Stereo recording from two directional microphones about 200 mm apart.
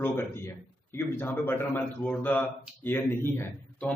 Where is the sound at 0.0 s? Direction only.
10° left (ahead or behind).